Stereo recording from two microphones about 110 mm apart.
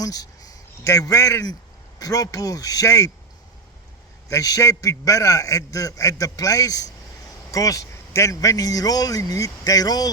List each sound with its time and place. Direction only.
0.0 s a man's voice: 35° left (ahead or behind)
4.3 s a man's voice: 30° left (ahead or behind)